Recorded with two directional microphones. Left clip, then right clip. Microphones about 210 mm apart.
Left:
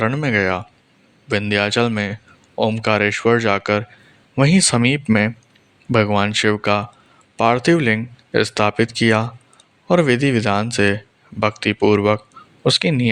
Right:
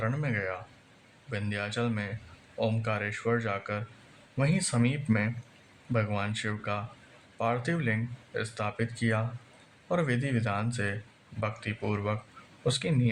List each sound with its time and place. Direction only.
0.0 s speech: 45° left (ahead or behind)